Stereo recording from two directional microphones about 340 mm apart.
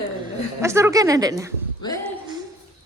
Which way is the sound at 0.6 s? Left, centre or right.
Centre.